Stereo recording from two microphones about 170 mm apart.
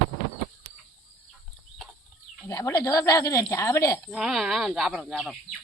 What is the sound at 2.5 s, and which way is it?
Speech, 15° left (ahead or behind).